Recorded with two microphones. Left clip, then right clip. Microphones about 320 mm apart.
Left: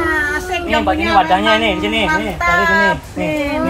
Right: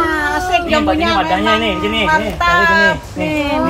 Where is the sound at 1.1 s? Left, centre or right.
Centre.